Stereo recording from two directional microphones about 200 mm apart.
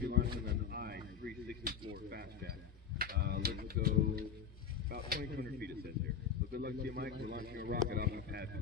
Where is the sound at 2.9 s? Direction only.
50° right (ahead or behind).